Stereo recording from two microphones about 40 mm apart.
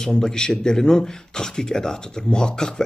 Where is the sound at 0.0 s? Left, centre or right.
Centre.